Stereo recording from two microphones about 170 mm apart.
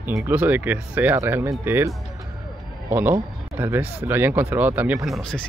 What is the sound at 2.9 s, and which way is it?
Speech, 10° right (ahead or behind).